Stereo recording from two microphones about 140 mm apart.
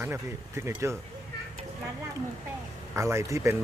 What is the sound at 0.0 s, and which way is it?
Speech, 20° right (ahead or behind).